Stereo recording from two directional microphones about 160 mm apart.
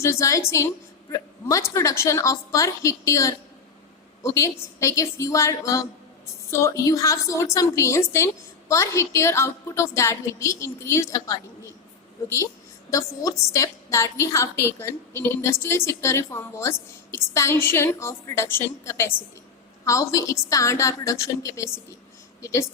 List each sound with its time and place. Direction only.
0.0 s a woman's voice: 15° left (ahead or behind)
12.9 s a woman's voice: 20° left (ahead or behind)